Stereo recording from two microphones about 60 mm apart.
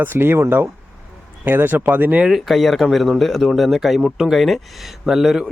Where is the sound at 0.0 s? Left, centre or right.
Right.